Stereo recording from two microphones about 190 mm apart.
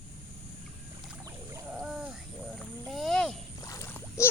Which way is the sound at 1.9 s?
5° right (ahead or behind).